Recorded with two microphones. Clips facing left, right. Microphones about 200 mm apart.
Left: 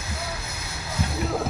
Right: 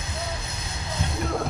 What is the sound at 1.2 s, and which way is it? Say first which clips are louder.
Music: even; 5° left (ahead or behind).